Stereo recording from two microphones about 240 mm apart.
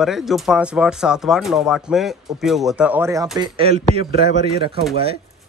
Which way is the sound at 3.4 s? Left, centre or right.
Right.